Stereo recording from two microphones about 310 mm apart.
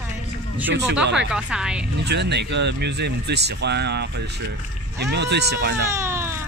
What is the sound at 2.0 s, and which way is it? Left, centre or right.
Speech, right.